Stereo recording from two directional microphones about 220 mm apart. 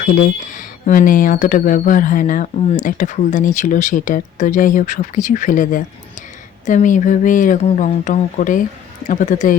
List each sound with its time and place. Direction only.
0.0 s speech: 35° left (ahead or behind)